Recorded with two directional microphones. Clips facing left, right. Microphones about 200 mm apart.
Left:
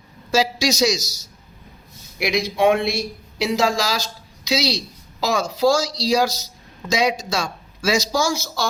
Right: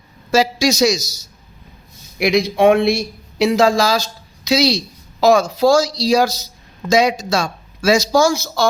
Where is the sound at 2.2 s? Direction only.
55° right (ahead or behind).